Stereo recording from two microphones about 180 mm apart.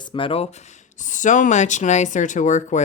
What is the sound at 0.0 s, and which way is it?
Speech, 30° left (ahead or behind).